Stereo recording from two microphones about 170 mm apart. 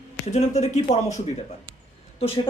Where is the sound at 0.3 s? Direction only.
40° left (ahead or behind).